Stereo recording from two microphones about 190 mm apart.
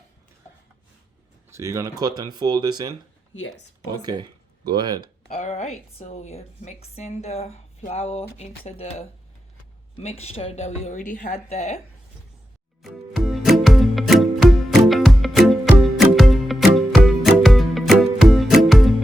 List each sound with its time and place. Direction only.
1.5 s speech: 15° right (ahead or behind)
5.3 s a woman's voice: 35° left (ahead or behind)
12.8 s music: centre (ahead or behind)